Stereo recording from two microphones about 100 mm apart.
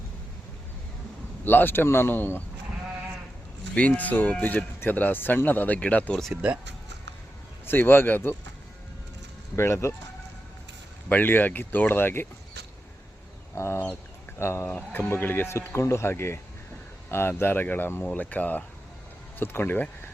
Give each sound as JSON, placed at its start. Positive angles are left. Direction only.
{"t": 1.5, "sound": "speech", "side_deg": 20}
{"t": 3.8, "sound": "speech", "side_deg": 15}
{"t": 6.3, "sound": "speech", "side_deg": -10}
{"t": 7.7, "sound": "speech", "side_deg": 20}
{"t": 9.6, "sound": "speech", "side_deg": 25}
{"t": 11.1, "sound": "speech", "side_deg": 20}
{"t": 13.6, "sound": "speech", "side_deg": 25}